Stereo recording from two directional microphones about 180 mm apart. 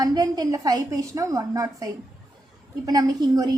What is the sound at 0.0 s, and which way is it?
A woman's voice, 20° right (ahead or behind).